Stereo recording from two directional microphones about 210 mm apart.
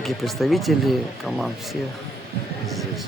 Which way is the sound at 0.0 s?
Centre (ahead or behind).